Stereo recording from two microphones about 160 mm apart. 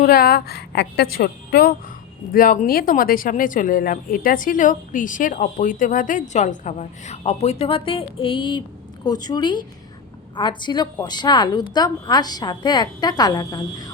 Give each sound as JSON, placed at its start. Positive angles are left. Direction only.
{"t": 0.0, "sound": "a woman's voice", "side_deg": 70}
{"t": 2.3, "sound": "a woman's voice", "side_deg": 60}